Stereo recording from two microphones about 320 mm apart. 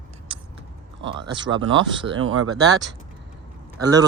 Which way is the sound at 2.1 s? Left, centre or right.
Right.